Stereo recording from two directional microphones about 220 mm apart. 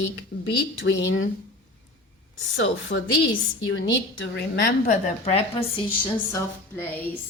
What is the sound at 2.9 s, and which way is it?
A woman's voice, 45° left (ahead or behind).